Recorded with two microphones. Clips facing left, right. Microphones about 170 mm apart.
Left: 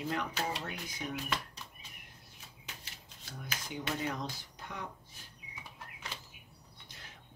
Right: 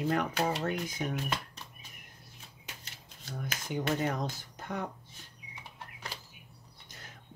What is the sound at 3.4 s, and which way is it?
Speech, 50° right (ahead or behind).